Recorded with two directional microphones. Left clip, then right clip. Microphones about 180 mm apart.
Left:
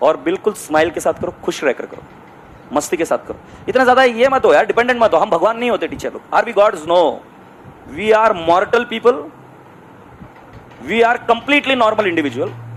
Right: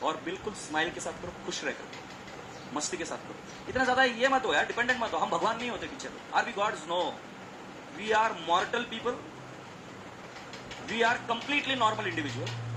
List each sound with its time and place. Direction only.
0.0 s a man's voice: 55° left (ahead or behind)
2.7 s a man's voice: 55° left (ahead or behind)
8.0 s a man's voice: 55° left (ahead or behind)
10.8 s a man's voice: 55° left (ahead or behind)